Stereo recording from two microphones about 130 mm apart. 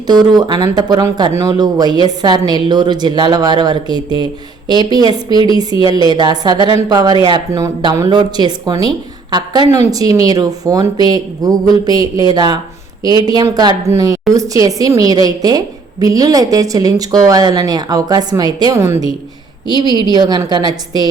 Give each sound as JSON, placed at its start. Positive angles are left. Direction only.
{"t": 0.1, "sound": "a woman's voice", "side_deg": -30}